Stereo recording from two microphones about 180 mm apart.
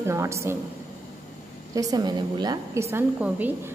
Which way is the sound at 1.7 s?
20° right (ahead or behind).